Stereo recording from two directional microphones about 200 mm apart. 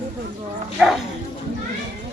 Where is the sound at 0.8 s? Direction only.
5° right (ahead or behind).